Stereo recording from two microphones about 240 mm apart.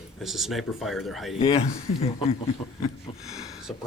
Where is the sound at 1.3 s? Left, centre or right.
Left.